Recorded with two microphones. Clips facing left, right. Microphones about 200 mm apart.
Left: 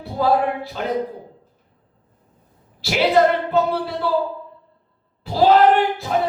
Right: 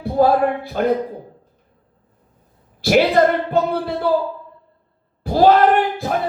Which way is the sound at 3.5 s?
55° right (ahead or behind).